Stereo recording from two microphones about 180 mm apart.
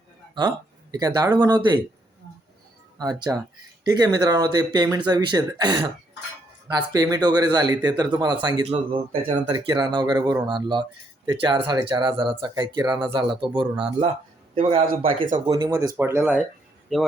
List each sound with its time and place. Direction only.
0.3 s speech: 20° right (ahead or behind)
3.0 s a man's voice: 20° right (ahead or behind)
16.9 s speech: centre (ahead or behind)